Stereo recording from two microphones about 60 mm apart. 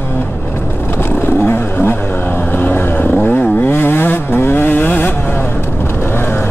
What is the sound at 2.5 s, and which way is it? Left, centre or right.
Vehicle, left.